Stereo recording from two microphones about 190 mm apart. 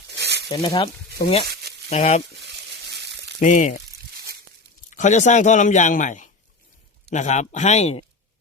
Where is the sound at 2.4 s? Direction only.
65° right (ahead or behind).